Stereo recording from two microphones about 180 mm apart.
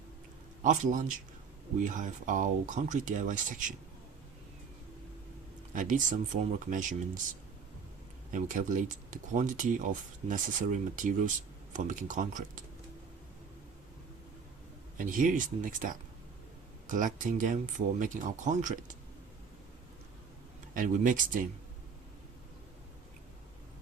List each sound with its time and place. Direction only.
0.6 s speech: 45° right (ahead or behind)
5.7 s speech: 45° right (ahead or behind)
8.3 s speech: 45° right (ahead or behind)
14.9 s speech: 45° right (ahead or behind)
20.7 s speech: 45° right (ahead or behind)